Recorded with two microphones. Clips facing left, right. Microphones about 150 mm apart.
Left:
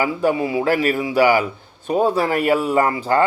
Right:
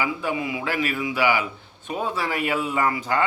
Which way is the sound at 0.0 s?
40° left (ahead or behind).